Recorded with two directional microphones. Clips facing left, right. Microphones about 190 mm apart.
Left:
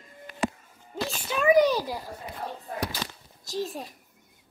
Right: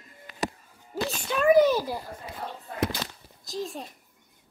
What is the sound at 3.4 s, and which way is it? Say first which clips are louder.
Speech: left 2 dB; centre (ahead or behind).